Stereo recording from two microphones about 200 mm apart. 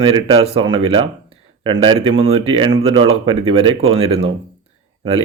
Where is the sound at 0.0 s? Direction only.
30° right (ahead or behind).